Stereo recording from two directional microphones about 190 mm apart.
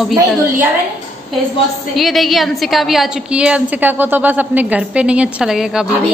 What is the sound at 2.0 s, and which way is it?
A woman's voice, centre (ahead or behind).